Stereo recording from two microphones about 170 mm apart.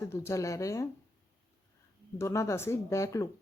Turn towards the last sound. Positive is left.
turn(degrees=15)  # may be behind; listen again after turning